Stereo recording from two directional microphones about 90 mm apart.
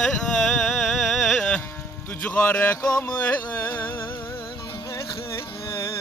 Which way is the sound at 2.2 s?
20° left (ahead or behind).